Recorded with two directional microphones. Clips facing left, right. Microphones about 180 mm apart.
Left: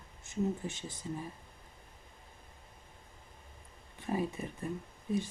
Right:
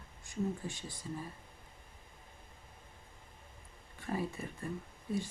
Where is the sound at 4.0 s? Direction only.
20° left (ahead or behind).